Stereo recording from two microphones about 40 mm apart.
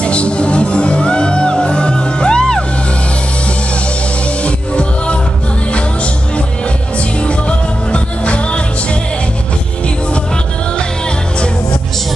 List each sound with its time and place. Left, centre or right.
0.0 s music: left
4.4 s music: left
7.2 s music: left